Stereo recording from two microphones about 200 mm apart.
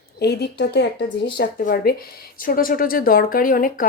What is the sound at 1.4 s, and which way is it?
Speech, 45° left (ahead or behind).